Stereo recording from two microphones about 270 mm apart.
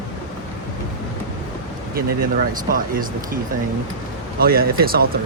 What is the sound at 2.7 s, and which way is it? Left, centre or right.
Speech, right.